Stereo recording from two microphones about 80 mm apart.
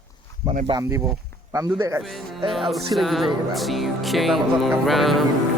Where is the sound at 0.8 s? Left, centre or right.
Right.